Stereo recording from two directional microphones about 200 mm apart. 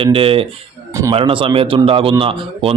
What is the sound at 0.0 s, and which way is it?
Speech, 30° right (ahead or behind).